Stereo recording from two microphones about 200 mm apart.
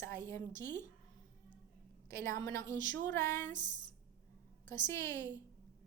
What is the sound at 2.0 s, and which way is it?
A woman's voice, 15° left (ahead or behind).